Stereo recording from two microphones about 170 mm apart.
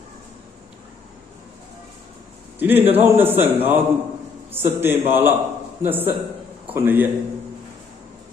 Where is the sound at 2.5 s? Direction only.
10° right (ahead or behind).